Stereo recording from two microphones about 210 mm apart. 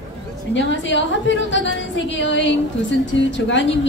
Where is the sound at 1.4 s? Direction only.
60° left (ahead or behind).